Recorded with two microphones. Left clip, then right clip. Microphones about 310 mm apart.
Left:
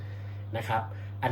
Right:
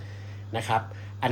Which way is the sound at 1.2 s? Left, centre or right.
Right.